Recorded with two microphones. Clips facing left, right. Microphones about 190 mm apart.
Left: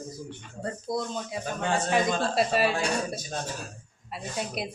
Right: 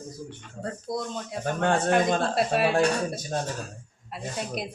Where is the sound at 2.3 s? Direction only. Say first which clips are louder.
Even; centre (ahead or behind).